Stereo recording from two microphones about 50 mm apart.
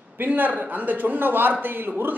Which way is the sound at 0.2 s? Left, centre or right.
Right.